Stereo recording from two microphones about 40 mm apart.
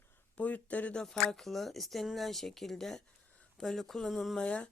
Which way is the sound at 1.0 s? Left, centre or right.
Centre.